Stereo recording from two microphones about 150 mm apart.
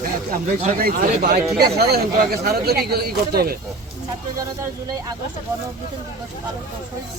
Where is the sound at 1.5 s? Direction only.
90° right.